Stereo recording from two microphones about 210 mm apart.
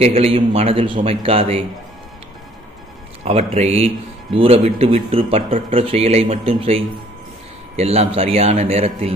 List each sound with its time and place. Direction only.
0.0 s speech: 30° right (ahead or behind)
3.2 s speech: 30° right (ahead or behind)